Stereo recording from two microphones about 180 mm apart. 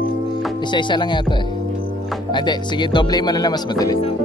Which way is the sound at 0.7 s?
25° left (ahead or behind).